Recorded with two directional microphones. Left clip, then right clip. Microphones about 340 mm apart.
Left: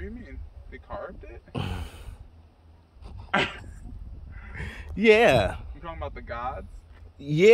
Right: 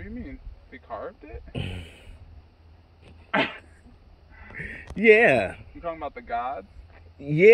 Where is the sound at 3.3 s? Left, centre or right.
Centre.